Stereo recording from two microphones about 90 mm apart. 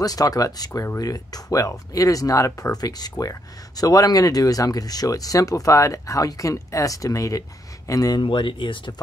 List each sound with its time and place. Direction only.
0.0 s speech: 45° left (ahead or behind)
8.2 s speech: 65° left (ahead or behind)